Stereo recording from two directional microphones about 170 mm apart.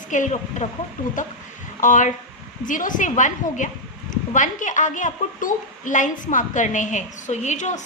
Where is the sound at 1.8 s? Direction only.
50° left (ahead or behind).